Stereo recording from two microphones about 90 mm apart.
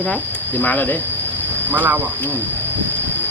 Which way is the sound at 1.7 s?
20° right (ahead or behind).